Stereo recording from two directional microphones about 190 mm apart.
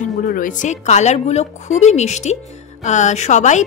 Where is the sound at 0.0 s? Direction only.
45° left (ahead or behind).